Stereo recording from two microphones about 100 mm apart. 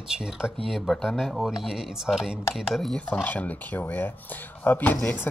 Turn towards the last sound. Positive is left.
turn(degrees=15)  # may be behind; listen again after turning